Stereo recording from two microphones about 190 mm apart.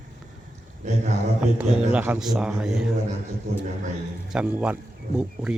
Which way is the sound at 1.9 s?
5° right (ahead or behind).